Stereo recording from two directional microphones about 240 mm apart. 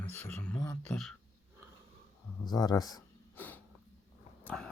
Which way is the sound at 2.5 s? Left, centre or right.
Centre.